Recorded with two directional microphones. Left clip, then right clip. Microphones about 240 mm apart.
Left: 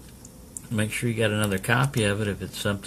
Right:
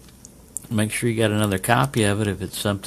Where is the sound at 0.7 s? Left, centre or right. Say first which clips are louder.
Right 4 dB; right.